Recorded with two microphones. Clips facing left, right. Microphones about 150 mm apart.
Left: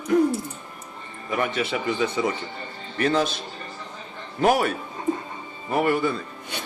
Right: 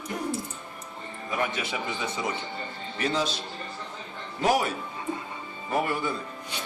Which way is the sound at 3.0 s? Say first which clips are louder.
Left 6 dB; 55° left (ahead or behind).